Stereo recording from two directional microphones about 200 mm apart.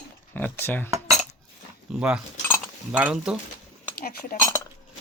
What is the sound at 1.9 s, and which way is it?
Speech, centre (ahead or behind).